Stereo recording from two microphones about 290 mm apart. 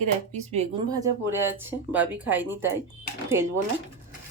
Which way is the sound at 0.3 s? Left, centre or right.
Right.